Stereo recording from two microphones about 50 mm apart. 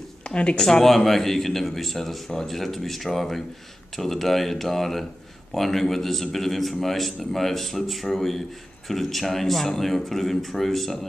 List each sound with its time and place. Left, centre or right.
0.3 s speech: left
0.7 s a man's voice: centre